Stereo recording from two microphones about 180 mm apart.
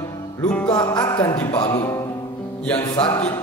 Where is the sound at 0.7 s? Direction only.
20° left (ahead or behind).